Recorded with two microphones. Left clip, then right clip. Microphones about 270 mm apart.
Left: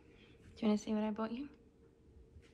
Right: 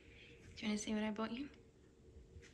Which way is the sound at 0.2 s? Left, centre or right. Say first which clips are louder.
Left 7 dB; centre.